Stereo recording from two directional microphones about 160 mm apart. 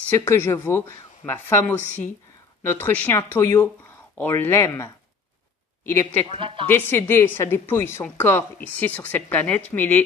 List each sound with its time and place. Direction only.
0.2 s speech: 15° left (ahead or behind)
6.3 s a woman's voice: 35° right (ahead or behind)
6.7 s speech: 15° left (ahead or behind)